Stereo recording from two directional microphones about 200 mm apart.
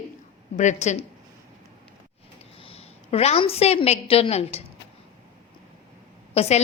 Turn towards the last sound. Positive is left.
turn(degrees=30)  # may be behind; listen again after turning